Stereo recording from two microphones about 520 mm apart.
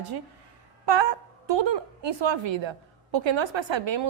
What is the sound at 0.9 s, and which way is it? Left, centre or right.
Speech, right.